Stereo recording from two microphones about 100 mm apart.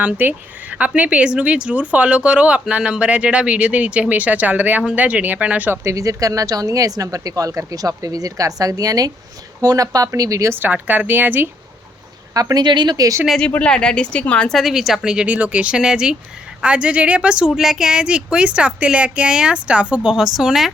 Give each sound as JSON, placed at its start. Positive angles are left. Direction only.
{"t": 0.0, "sound": "speech", "side_deg": -15}
{"t": 5.8, "sound": "speech", "side_deg": -30}
{"t": 10.6, "sound": "a woman's voice", "side_deg": -15}
{"t": 12.3, "sound": "speech", "side_deg": -35}
{"t": 13.2, "sound": "speech", "side_deg": 5}